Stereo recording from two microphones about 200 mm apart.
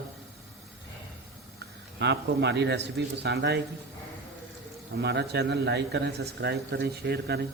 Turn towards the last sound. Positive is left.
turn(degrees=-55)  # may be behind; listen again after turning